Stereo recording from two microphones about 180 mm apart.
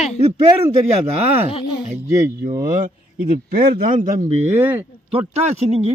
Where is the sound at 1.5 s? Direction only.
30° left (ahead or behind).